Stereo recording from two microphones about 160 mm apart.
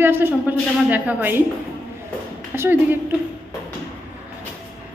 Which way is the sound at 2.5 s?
15° right (ahead or behind).